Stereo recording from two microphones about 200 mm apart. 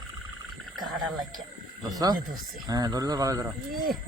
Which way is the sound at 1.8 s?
20° right (ahead or behind).